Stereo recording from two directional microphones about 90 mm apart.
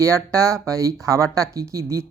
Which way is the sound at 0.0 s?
35° right (ahead or behind).